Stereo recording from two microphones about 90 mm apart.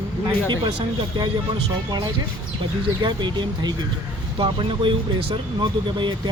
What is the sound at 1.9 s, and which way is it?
Speech, 50° right (ahead or behind).